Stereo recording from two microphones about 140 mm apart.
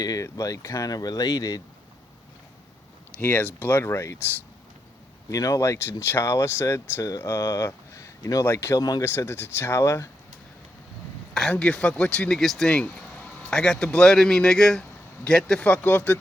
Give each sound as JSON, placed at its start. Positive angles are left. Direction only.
{"t": 0.0, "sound": "speech", "side_deg": 25}
{"t": 3.2, "sound": "speech", "side_deg": 10}
{"t": 11.3, "sound": "speech", "side_deg": 5}